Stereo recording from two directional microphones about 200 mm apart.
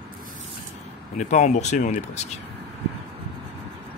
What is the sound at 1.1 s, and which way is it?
Speech, 35° left (ahead or behind).